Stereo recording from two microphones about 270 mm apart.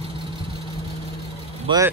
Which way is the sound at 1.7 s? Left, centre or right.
Centre.